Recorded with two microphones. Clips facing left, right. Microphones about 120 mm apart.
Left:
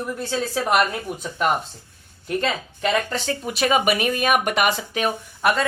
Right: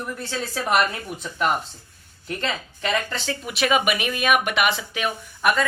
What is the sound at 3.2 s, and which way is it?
A woman's voice, 40° left (ahead or behind).